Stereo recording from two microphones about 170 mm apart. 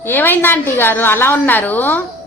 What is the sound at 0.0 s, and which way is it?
A woman's voice, 10° left (ahead or behind).